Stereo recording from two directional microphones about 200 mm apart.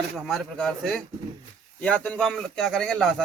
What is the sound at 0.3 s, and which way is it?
A man's voice, centre (ahead or behind).